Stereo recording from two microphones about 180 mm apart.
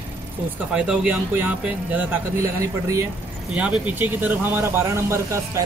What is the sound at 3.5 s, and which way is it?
Speech, 5° right (ahead or behind).